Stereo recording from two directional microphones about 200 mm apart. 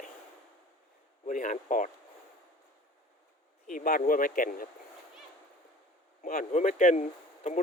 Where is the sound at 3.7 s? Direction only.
45° left (ahead or behind).